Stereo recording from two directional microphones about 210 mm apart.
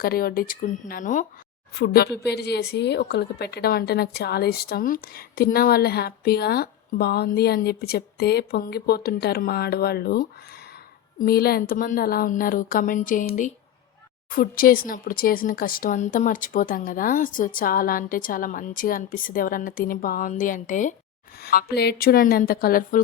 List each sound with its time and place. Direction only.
0.0 s speech: 45° left (ahead or behind)
1.7 s speech: 50° left (ahead or behind)
21.4 s speech: 50° left (ahead or behind)